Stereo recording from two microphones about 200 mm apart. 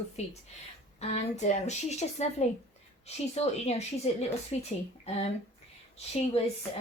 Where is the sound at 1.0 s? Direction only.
35° left (ahead or behind).